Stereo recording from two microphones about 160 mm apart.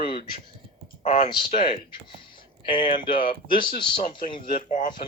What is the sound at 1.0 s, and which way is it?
Speech, 50° left (ahead or behind).